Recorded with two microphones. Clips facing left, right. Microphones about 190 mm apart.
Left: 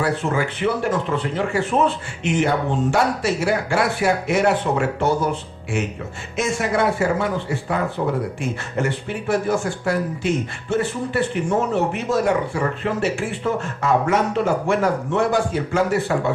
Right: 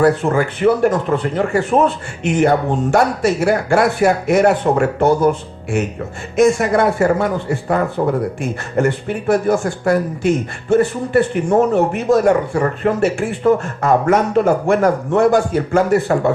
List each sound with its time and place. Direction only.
0.0 s speech: 50° right (ahead or behind)